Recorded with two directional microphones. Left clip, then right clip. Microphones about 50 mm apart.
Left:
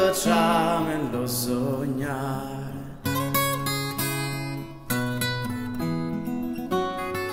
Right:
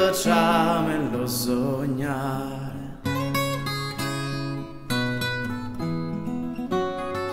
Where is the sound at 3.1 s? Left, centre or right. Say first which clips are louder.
Left 1 dB; left.